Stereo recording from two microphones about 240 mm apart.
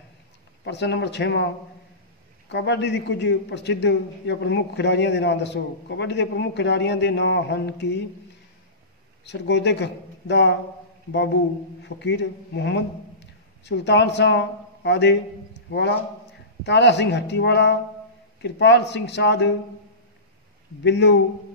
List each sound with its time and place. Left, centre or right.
0.7 s a man's voice: left
2.5 s a man's voice: left
9.2 s a man's voice: left
11.8 s a man's voice: left
20.8 s a man's voice: left